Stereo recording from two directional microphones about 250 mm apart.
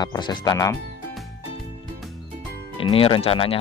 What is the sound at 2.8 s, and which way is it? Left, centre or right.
Speech, left.